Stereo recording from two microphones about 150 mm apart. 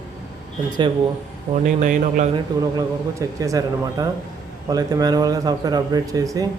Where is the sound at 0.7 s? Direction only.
30° right (ahead or behind).